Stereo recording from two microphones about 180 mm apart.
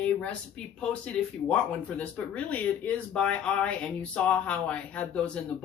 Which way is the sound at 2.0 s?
10° left (ahead or behind).